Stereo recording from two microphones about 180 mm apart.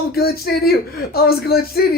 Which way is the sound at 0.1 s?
60° left (ahead or behind).